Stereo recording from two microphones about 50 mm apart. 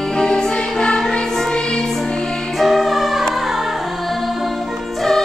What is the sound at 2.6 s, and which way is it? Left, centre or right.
Music, centre.